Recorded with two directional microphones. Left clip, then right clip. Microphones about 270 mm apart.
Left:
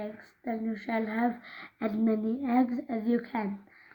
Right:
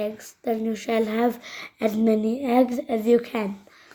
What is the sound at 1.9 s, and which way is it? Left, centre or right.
A woman's voice, right.